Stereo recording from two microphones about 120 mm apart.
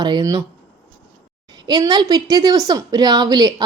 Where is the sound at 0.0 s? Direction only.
35° right (ahead or behind).